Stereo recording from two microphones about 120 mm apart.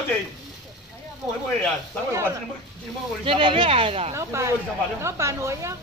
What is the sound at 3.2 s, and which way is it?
Speech, 45° right (ahead or behind).